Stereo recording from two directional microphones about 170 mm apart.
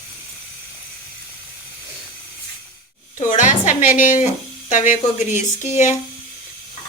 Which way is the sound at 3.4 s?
50° left (ahead or behind).